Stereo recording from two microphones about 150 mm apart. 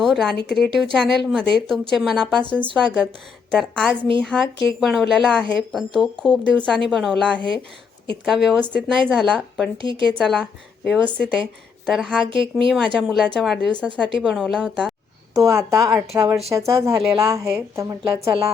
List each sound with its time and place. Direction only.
0.0 s a woman's voice: centre (ahead or behind)
9.7 s speech: 35° right (ahead or behind)
10.0 s a woman's voice: 5° left (ahead or behind)
12.3 s speech: 35° right (ahead or behind)
12.6 s a woman's voice: centre (ahead or behind)
15.4 s a woman's voice: 20° right (ahead or behind)